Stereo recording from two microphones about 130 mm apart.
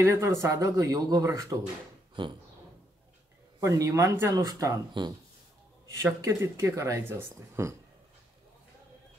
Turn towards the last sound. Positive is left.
turn(degrees=-20)  # may be behind; listen again after turning